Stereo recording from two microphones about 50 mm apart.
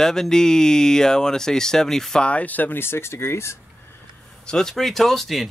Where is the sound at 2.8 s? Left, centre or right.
Left.